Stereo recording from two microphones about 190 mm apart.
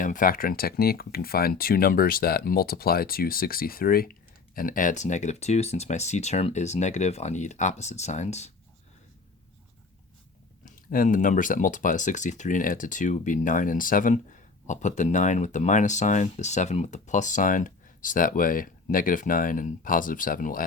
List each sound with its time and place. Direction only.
0.0 s speech: 45° left (ahead or behind)
10.7 s speech: 45° left (ahead or behind)